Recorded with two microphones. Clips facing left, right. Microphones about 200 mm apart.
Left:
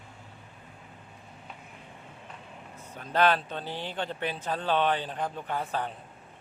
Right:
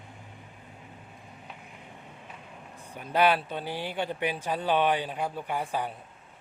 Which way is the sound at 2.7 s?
15° right (ahead or behind).